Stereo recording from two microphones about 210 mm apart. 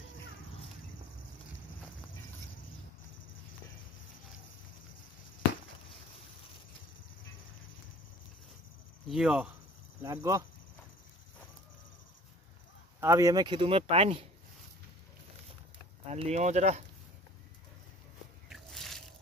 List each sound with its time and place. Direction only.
9.1 s speech: 5° right (ahead or behind)
10.0 s speech: 15° right (ahead or behind)
13.0 s speech: 15° right (ahead or behind)
16.1 s speech: 30° right (ahead or behind)
18.5 s a sound: centre (ahead or behind)